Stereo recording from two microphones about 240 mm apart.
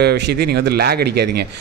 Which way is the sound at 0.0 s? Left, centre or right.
Right.